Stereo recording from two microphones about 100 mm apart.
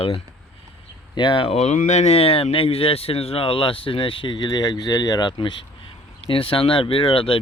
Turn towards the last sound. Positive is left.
turn(degrees=60)  # may be behind; listen again after turning